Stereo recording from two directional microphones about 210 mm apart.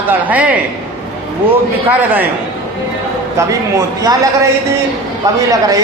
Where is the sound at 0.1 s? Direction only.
5° right (ahead or behind).